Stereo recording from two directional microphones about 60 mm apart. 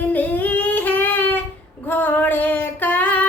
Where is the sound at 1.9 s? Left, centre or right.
Left.